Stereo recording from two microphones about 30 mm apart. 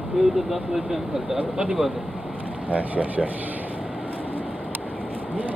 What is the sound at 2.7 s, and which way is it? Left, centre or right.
Speech, right.